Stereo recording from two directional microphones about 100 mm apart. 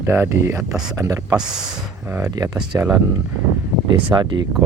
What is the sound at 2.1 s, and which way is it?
Speech, 35° right (ahead or behind).